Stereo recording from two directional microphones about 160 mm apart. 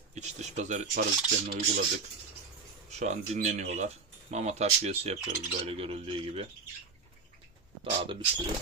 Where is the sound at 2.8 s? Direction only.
45° right (ahead or behind).